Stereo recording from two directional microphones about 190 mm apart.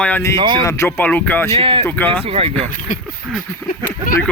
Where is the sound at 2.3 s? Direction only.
30° right (ahead or behind).